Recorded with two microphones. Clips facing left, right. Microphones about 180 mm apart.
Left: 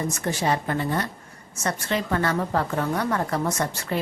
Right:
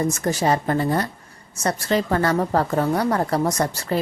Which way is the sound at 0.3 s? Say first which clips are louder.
Right 3 dB; 40° right (ahead or behind).